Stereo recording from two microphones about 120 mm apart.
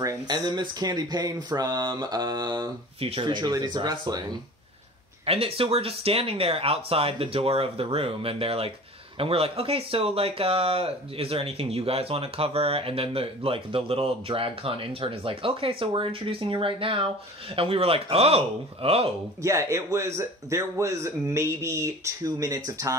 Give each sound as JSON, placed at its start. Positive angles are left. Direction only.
{"t": 0.0, "sound": "speech", "side_deg": -30}
{"t": 0.6, "sound": "mantra", "side_deg": -35}
{"t": 5.2, "sound": "speech", "side_deg": -55}
{"t": 19.4, "sound": "a man's voice", "side_deg": -25}